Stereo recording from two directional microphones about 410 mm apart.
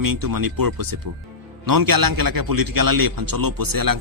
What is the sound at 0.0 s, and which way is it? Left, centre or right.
A man's voice, right.